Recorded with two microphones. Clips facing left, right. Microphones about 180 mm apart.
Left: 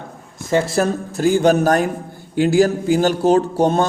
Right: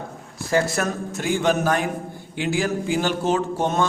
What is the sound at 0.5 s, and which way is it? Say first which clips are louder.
Speech: left 5 dB; 30° left (ahead or behind).